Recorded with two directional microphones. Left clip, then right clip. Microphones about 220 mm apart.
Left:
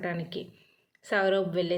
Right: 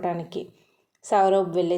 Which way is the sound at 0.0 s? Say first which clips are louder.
Right 6 dB; 10° right (ahead or behind).